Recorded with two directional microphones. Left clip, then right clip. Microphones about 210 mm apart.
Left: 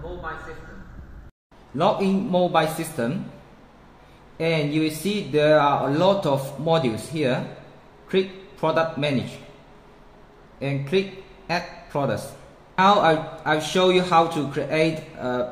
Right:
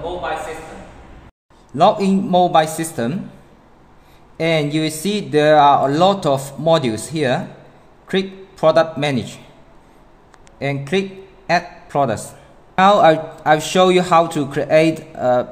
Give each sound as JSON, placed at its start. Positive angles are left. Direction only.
{"t": 1.8, "sound": "speech", "side_deg": -55}
{"t": 4.4, "sound": "a man's voice", "side_deg": -55}
{"t": 10.6, "sound": "a man's voice", "side_deg": -55}